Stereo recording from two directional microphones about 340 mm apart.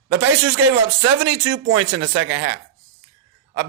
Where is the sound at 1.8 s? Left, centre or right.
Right.